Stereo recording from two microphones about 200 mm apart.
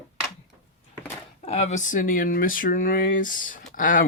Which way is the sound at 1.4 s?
30° left (ahead or behind).